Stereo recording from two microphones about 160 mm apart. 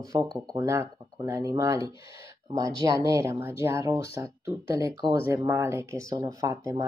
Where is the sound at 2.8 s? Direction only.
20° right (ahead or behind).